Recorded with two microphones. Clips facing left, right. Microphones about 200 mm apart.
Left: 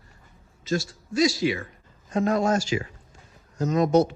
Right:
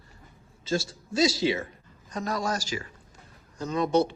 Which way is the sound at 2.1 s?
40° right (ahead or behind).